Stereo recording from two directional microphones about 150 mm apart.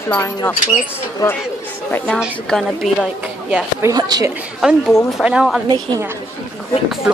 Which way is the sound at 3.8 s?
25° right (ahead or behind).